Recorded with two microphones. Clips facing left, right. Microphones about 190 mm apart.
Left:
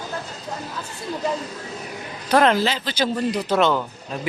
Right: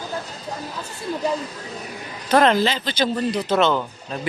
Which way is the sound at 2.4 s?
5° left (ahead or behind).